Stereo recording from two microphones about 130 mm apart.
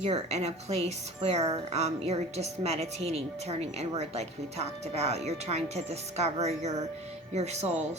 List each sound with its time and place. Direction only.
0.0 s speech: 55° right (ahead or behind)